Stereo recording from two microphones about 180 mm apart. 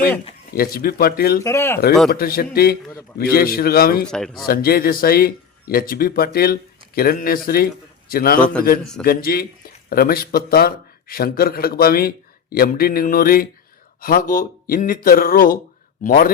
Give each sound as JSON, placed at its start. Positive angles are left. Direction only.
{"t": 0.5, "sound": "speech", "side_deg": 55}
{"t": 1.5, "sound": "speech", "side_deg": 15}
{"t": 2.0, "sound": "speech", "side_deg": 55}
{"t": 4.0, "sound": "speech", "side_deg": 5}
{"t": 4.4, "sound": "speech", "side_deg": 55}